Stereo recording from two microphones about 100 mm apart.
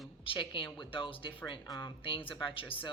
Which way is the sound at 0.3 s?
60° left (ahead or behind).